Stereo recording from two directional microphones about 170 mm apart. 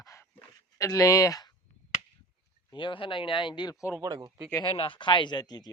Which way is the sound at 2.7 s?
30° left (ahead or behind).